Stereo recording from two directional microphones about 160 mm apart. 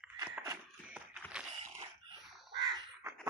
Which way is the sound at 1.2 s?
10° left (ahead or behind).